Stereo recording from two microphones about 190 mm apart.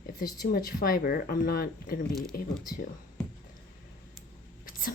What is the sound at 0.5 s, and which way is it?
Speech, 50° left (ahead or behind).